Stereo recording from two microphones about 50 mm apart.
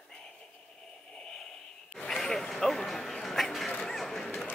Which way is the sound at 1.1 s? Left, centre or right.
Centre.